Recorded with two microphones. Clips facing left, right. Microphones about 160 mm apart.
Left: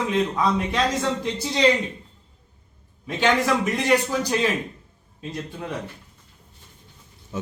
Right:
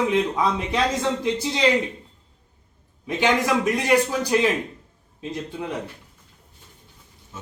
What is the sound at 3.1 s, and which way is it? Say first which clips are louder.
Speech: even; 15° right (ahead or behind).